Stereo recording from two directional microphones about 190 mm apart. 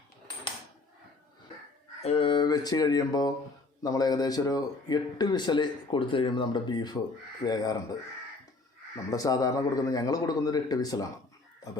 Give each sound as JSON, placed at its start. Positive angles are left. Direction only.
{"t": 2.0, "sound": "speech", "side_deg": 30}
{"t": 9.0, "sound": "speech", "side_deg": 20}